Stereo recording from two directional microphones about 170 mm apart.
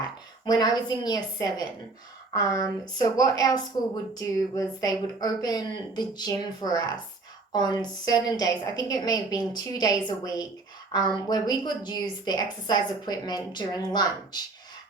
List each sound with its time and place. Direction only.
0.0 s a woman's voice: 25° left (ahead or behind)